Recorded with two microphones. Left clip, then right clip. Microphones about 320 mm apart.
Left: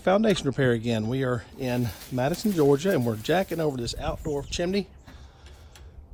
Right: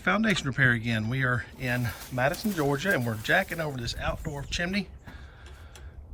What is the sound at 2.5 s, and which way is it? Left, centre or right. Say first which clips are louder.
Speech: left 7 dB; right.